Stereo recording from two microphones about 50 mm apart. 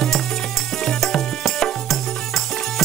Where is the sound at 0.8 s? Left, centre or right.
Centre.